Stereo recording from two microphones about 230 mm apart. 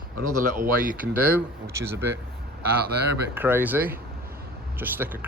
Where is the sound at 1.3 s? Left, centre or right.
Centre.